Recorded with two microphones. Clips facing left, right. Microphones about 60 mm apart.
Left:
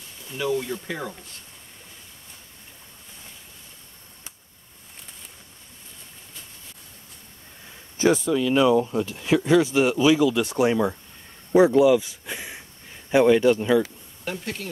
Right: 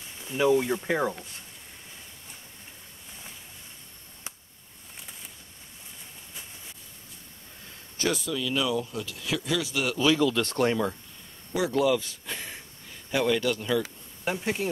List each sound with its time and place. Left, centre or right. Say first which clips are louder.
0.4 s speech: right 3 dB; centre
8.0 s speech: left 8 dB; left
9.9 s speech: left 1 dB; centre
13.1 s speech: left 9 dB; left
14.2 s speech: right 3 dB; centre